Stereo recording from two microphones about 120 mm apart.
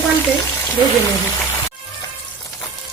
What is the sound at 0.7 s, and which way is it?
Speech, 15° left (ahead or behind).